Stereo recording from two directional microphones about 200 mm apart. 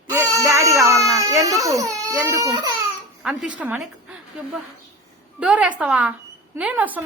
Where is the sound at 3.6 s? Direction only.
10° right (ahead or behind).